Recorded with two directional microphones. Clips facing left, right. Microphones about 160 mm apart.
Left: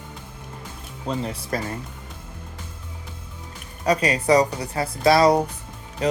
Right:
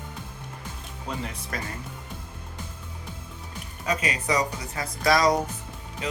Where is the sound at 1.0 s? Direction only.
30° left (ahead or behind).